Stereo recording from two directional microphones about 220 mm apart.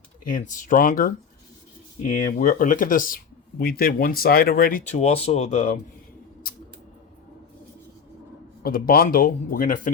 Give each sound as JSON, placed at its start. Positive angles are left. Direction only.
{"t": 0.3, "sound": "speech", "side_deg": 35}
{"t": 8.6, "sound": "speech", "side_deg": 40}